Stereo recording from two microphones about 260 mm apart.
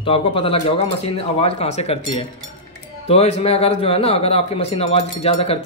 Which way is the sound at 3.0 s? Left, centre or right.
Left.